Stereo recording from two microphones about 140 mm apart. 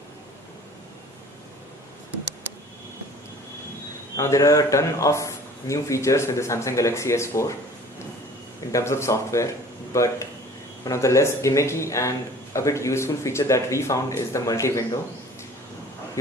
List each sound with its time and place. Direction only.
4.2 s a man's voice: 25° left (ahead or behind)
8.7 s a man's voice: 20° left (ahead or behind)